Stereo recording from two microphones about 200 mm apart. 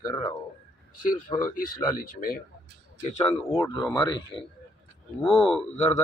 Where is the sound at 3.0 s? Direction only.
35° left (ahead or behind).